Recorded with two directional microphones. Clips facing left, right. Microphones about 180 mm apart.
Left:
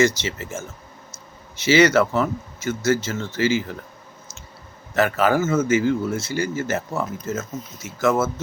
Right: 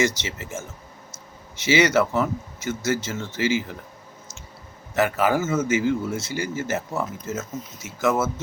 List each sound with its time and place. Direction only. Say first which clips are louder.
0.2 s a man's voice: left 3 dB; 15° right (ahead or behind)
1.6 s a man's voice: left 3 dB; 15° right (ahead or behind)
4.9 s a man's voice: left 2 dB; 15° right (ahead or behind)